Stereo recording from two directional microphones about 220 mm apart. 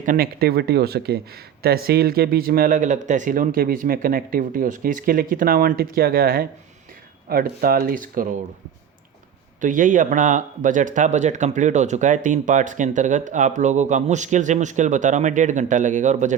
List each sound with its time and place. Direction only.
0.0 s speech: 40° right (ahead or behind)
9.6 s speech: 35° right (ahead or behind)